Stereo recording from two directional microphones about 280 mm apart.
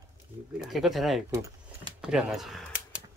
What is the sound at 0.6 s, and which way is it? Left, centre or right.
Speech, centre.